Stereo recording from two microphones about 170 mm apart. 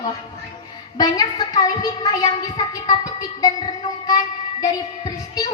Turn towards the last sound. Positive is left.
turn(degrees=25)  # may be behind; listen again after turning